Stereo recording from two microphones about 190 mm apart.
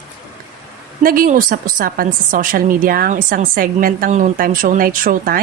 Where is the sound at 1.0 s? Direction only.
45° right (ahead or behind).